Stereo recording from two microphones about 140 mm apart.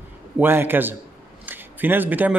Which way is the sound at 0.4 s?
15° right (ahead or behind).